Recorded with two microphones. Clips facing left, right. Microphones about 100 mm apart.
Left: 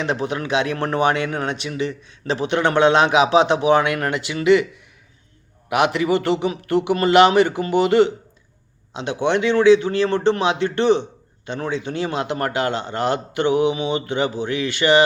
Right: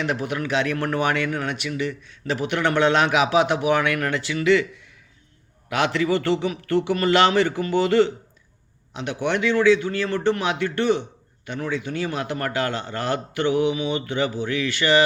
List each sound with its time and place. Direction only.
0.0 s a man's voice: 20° left (ahead or behind)